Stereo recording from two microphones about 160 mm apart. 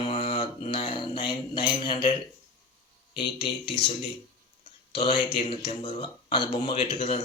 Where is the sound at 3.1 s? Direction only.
30° left (ahead or behind).